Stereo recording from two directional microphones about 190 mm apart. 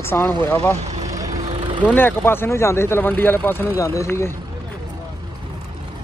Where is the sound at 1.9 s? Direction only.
10° left (ahead or behind).